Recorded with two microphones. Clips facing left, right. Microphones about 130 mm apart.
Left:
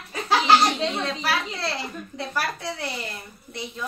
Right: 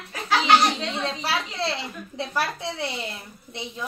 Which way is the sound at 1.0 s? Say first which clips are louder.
Left 1 dB; 25° right (ahead or behind).